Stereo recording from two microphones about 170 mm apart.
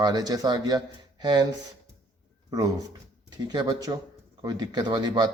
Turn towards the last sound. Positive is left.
turn(degrees=-25)  # may be behind; listen again after turning